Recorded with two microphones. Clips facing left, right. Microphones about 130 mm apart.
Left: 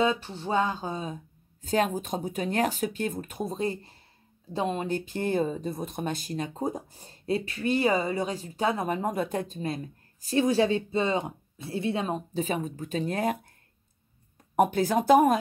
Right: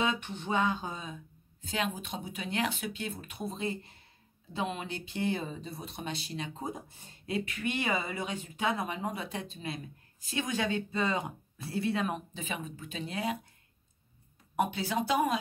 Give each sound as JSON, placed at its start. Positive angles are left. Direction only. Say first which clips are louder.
{"t": 0.0, "sound": "speech", "louder": "left 6 dB", "side_deg": 35}
{"t": 14.5, "sound": "speech", "louder": "left 8 dB", "side_deg": 45}